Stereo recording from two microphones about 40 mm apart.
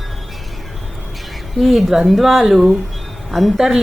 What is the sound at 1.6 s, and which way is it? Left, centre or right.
A woman's voice, centre.